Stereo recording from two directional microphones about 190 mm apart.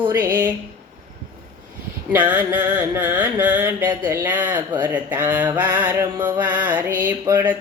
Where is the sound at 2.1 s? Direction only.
10° right (ahead or behind).